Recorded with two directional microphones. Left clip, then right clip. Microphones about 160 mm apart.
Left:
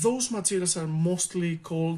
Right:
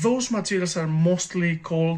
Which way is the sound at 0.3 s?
30° left (ahead or behind).